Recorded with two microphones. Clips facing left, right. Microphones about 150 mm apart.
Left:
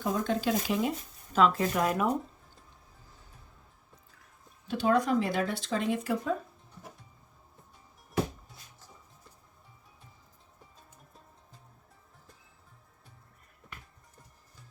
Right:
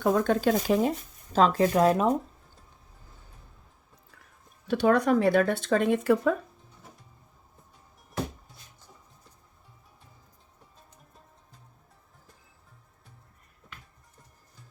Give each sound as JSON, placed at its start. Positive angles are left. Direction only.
{"t": 0.0, "sound": "speech", "side_deg": -60}
{"t": 4.7, "sound": "speech", "side_deg": -70}